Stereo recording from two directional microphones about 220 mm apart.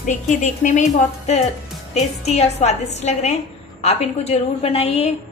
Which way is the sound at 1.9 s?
30° left (ahead or behind).